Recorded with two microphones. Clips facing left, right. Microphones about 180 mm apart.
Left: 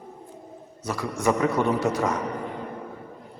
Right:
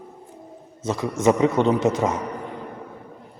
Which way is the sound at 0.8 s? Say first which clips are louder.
Right 5 dB; 20° right (ahead or behind).